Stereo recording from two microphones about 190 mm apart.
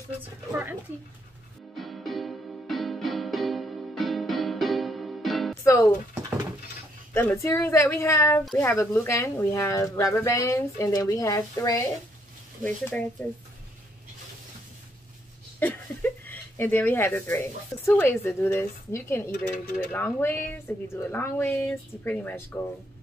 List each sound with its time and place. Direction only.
0.5 s speech: 10° right (ahead or behind)
1.8 s music: centre (ahead or behind)
5.5 s music: 15° left (ahead or behind)
7.2 s speech: 10° left (ahead or behind)
15.6 s speech: 10° left (ahead or behind)